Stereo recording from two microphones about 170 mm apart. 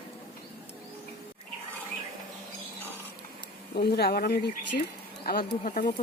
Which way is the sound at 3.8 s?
65° left (ahead or behind).